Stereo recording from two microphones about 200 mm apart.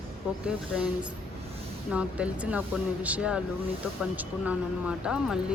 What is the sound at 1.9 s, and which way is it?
Speech, 5° right (ahead or behind).